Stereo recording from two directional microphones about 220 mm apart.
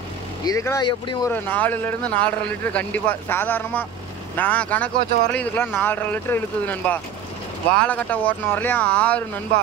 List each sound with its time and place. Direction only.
0.5 s a man's voice: 15° left (ahead or behind)
1.3 s a man's voice: 10° left (ahead or behind)